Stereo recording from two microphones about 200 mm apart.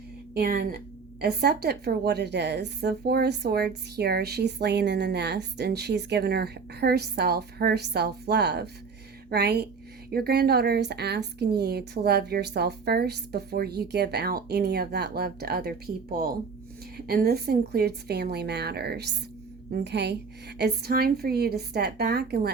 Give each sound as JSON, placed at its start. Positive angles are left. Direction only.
{"t": 0.3, "sound": "a woman's voice", "side_deg": -50}
{"t": 17.1, "sound": "a woman's voice", "side_deg": -50}